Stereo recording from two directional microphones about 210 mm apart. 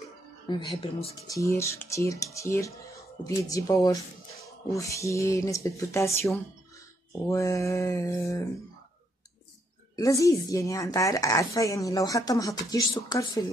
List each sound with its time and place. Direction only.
0.5 s a woman's voice: 20° left (ahead or behind)
9.9 s a woman's voice: 15° left (ahead or behind)